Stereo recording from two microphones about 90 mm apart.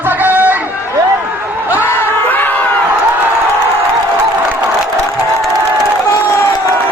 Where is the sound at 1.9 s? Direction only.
20° left (ahead or behind).